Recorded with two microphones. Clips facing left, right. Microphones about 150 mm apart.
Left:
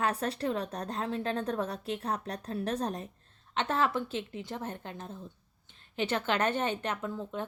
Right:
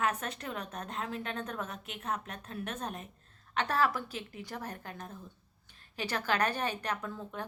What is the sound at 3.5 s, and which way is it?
Speech, 25° left (ahead or behind).